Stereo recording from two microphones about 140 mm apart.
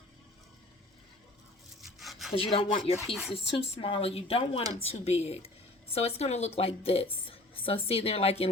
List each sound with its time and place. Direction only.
1.8 s rub: centre (ahead or behind)
2.3 s a woman's voice: 40° left (ahead or behind)